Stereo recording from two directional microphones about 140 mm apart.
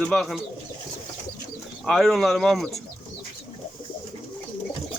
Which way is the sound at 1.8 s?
Centre (ahead or behind).